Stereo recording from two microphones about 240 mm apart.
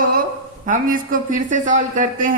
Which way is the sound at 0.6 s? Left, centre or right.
Right.